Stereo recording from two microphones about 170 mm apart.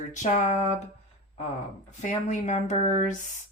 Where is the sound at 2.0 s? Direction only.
45° left (ahead or behind).